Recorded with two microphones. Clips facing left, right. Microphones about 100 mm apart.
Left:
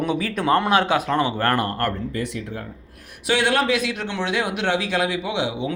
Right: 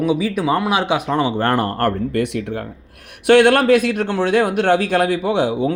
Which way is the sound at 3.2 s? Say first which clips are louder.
Right 9 dB; 60° right (ahead or behind).